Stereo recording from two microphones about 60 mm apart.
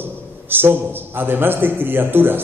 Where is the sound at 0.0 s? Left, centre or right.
Right.